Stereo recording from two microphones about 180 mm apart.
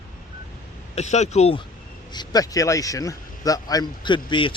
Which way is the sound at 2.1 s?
20° left (ahead or behind).